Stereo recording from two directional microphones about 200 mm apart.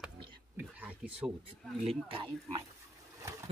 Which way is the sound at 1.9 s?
25° right (ahead or behind).